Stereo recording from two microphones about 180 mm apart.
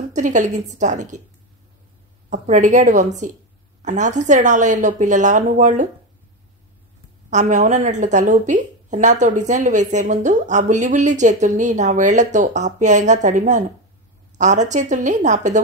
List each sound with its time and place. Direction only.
0.1 s a woman's voice: 45° right (ahead or behind)
2.2 s a woman's voice: 40° right (ahead or behind)
7.2 s a woman's voice: 40° right (ahead or behind)